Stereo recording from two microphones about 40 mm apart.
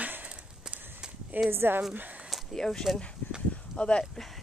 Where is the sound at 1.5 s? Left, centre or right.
Right.